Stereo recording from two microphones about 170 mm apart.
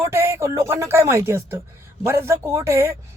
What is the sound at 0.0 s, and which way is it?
Speech, 15° right (ahead or behind).